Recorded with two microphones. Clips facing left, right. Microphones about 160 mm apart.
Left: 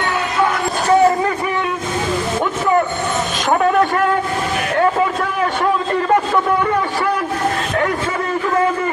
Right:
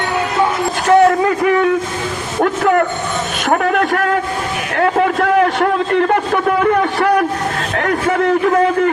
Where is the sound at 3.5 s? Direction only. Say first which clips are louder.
Even; 70° right (ahead or behind).